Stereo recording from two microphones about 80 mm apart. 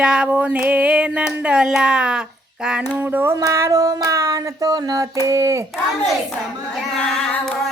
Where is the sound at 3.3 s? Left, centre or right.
Right.